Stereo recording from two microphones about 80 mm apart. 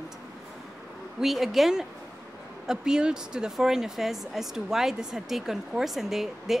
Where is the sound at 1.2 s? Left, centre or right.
Centre.